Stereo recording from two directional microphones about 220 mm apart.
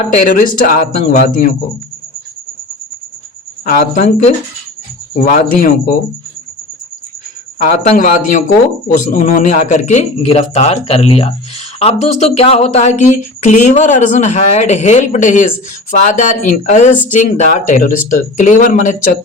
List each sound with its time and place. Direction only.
0.0 s speech: 35° left (ahead or behind)
3.7 s speech: 35° left (ahead or behind)
7.6 s speech: 35° left (ahead or behind)